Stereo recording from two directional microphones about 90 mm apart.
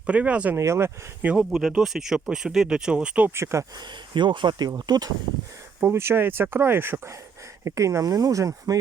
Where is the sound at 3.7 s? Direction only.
55° right (ahead or behind).